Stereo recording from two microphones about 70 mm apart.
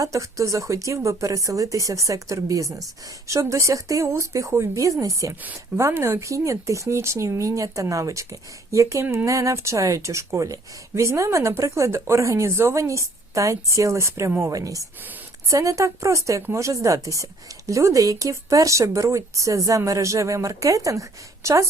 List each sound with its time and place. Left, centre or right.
0.0 s speech: right
5.7 s speech: right
14.5 s speech: right